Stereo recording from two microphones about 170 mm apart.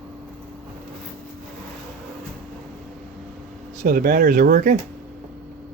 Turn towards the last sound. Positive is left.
turn(degrees=-60)  # may be behind; listen again after turning